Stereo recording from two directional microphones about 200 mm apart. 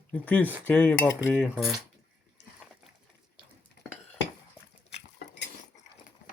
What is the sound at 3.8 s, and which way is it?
Cutlery, 55° left (ahead or behind).